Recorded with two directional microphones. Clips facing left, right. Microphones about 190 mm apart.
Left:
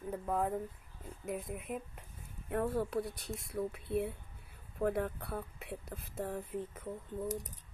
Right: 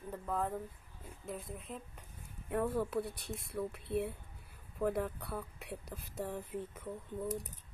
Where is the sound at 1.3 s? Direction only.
15° left (ahead or behind).